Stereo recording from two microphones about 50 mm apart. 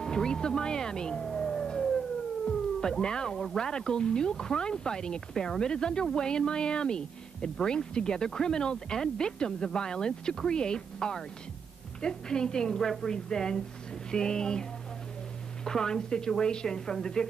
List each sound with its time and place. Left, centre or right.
0.0 s music: centre
2.4 s speech: centre